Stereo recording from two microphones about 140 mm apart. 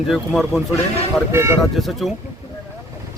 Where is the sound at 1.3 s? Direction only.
20° right (ahead or behind).